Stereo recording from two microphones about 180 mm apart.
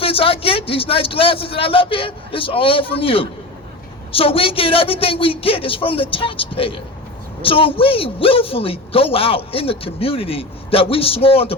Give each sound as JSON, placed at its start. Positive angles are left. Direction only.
{"t": 0.0, "sound": "a man's voice", "side_deg": 30}